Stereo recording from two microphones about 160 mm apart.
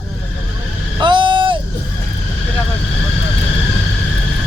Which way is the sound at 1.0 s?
30° right (ahead or behind).